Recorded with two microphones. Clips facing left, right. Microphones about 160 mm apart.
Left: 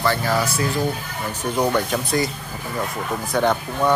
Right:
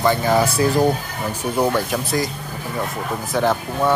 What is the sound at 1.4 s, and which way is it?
Speech, 5° right (ahead or behind).